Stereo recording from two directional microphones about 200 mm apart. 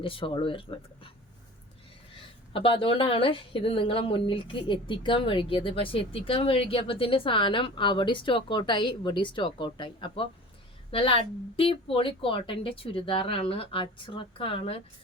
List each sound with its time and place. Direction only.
0.0 s a woman's voice: 25° left (ahead or behind)
2.1 s a woman's voice: 25° left (ahead or behind)